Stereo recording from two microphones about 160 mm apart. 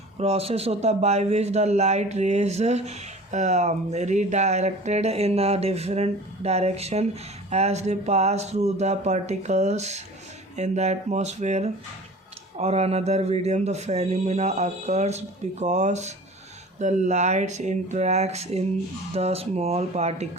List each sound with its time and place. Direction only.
0.2 s speech: 40° right (ahead or behind)